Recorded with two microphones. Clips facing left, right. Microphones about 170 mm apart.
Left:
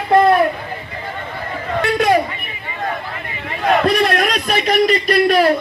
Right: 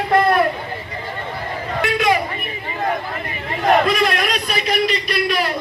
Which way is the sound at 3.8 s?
40° left (ahead or behind).